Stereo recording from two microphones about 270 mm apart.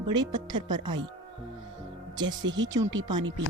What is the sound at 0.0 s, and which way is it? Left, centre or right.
Speech, centre.